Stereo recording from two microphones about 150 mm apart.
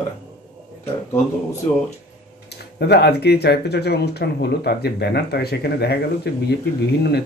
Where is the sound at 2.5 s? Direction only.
90° left.